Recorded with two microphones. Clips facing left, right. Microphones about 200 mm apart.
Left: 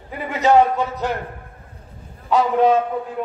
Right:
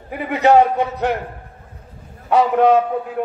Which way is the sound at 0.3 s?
60° right (ahead or behind).